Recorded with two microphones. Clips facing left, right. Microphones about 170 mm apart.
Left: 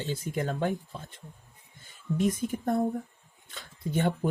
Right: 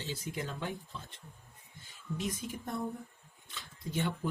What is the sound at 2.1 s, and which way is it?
Speech, 50° left (ahead or behind).